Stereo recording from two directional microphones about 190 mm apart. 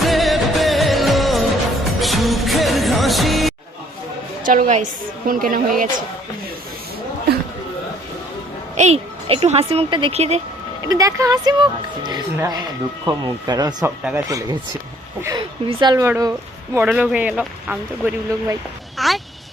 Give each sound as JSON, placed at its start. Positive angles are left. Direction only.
{"t": 0.0, "sound": "music", "side_deg": 0}
{"t": 4.4, "sound": "a woman's voice", "side_deg": -40}
{"t": 8.7, "sound": "speech", "side_deg": -35}
{"t": 10.8, "sound": "speech", "side_deg": -20}
{"t": 14.0, "sound": "speech", "side_deg": -5}
{"t": 15.2, "sound": "speech", "side_deg": -20}